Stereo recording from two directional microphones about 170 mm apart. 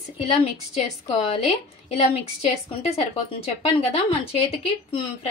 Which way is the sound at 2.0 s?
35° left (ahead or behind).